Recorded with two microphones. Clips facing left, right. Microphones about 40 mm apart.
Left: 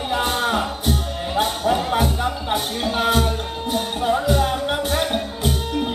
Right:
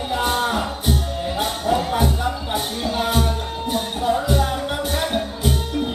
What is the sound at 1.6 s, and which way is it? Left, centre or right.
Music, centre.